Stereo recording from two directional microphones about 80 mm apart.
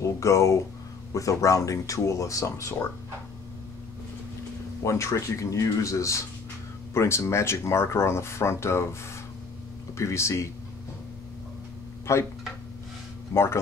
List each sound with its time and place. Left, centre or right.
0.0 s speech: left
4.8 s speech: left
9.9 s speech: left
12.1 s speech: left
13.3 s speech: left